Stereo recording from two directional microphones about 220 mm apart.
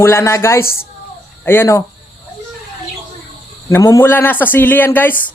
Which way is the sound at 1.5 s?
10° left (ahead or behind).